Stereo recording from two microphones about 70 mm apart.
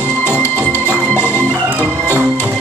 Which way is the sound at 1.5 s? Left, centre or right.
Right.